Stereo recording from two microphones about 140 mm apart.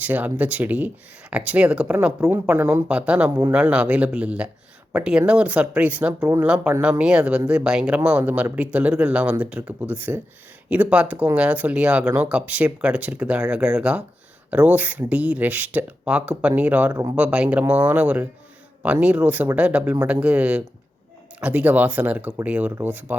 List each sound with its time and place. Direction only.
0.0 s speech: 10° right (ahead or behind)